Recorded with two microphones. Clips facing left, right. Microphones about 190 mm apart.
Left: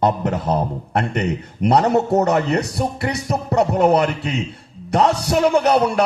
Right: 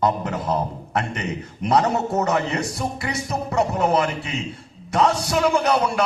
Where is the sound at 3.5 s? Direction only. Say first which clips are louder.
Left 5 dB; 65° left (ahead or behind).